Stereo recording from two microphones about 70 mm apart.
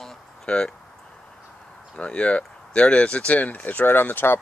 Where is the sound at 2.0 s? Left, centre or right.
Centre.